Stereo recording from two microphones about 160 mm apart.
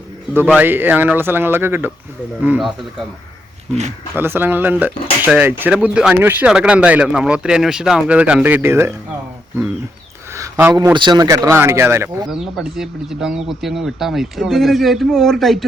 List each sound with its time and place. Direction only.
0.5 s speech: 10° right (ahead or behind)
4.1 s speech: 15° right (ahead or behind)
10.3 s a sound: 15° right (ahead or behind)
10.9 s speech: 25° right (ahead or behind)
12.3 s speech: centre (ahead or behind)